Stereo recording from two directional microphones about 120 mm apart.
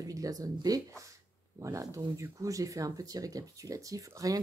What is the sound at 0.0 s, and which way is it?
Speech, 30° right (ahead or behind).